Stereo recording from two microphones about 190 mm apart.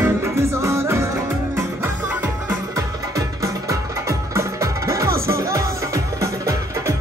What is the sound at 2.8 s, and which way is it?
Music, 15° right (ahead or behind).